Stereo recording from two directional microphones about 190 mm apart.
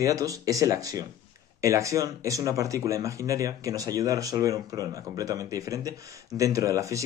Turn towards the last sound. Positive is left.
turn(degrees=-15)  # may be behind; listen again after turning